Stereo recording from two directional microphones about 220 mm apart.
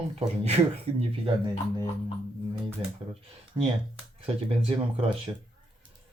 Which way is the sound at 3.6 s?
15° right (ahead or behind).